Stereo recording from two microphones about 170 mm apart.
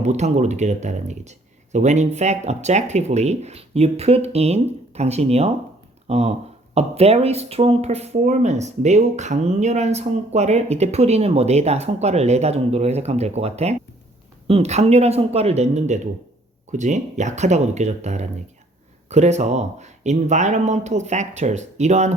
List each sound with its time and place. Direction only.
0.0 s speech: 40° right (ahead or behind)